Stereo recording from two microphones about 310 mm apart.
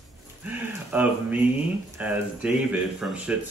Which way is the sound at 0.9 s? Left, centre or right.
Centre.